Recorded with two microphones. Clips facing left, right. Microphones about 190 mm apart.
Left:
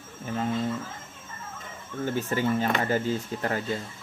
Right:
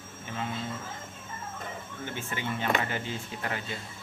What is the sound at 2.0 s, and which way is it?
Speech, 40° left (ahead or behind).